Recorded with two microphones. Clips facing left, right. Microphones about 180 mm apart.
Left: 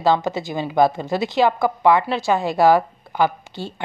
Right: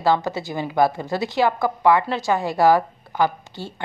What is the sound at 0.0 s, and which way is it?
A woman's voice, 20° left (ahead or behind).